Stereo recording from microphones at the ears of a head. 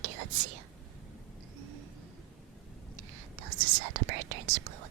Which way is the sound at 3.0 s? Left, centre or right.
Right.